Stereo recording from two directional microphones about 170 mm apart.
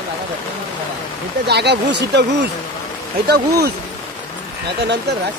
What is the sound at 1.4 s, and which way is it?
Speech, 80° right.